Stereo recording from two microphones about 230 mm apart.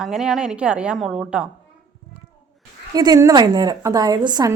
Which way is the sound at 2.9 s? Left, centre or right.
Centre.